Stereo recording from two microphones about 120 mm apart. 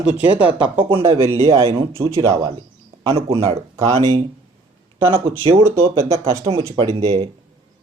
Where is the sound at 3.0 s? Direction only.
55° right (ahead or behind).